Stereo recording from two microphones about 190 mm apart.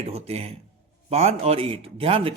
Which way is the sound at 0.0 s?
30° right (ahead or behind).